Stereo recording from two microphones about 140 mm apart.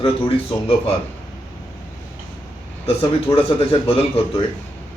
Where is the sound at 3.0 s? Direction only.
40° left (ahead or behind).